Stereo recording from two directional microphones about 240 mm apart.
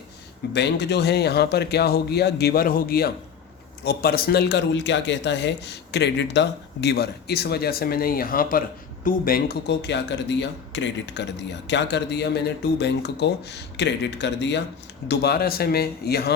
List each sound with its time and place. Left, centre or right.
0.5 s speech: left